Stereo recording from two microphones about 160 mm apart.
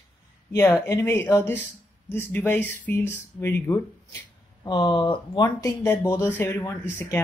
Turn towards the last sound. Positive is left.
turn(degrees=15)  # may be behind; listen again after turning